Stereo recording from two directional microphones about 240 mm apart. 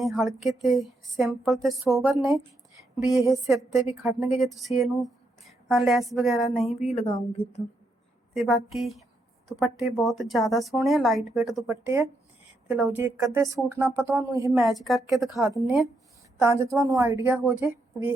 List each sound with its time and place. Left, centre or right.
0.0 s a woman's voice: centre
3.4 s a woman's voice: centre
4.3 s a woman's voice: centre
6.9 s speech: left
8.3 s a woman's voice: centre
14.6 s a woman's voice: centre